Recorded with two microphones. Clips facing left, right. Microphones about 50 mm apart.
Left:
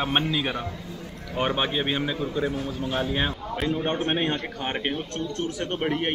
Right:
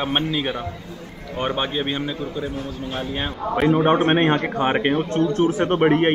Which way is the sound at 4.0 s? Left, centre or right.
Right.